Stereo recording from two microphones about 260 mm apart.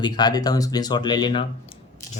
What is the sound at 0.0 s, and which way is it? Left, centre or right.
Speech, centre.